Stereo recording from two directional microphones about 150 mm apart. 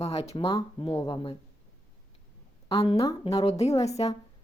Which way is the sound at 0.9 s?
35° left (ahead or behind).